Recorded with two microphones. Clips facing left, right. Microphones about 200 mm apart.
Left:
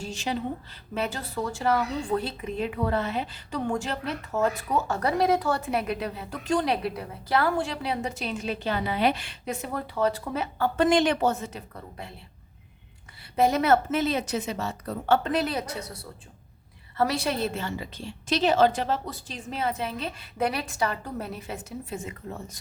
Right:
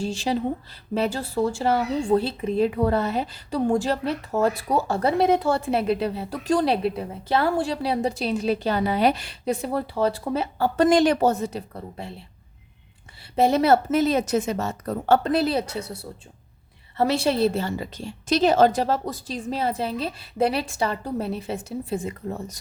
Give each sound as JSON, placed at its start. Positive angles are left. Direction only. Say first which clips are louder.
{"t": 0.0, "sound": "a woman's voice", "louder": "right 6 dB", "side_deg": -30}
{"t": 13.3, "sound": "a woman's voice", "louder": "right 3 dB", "side_deg": -30}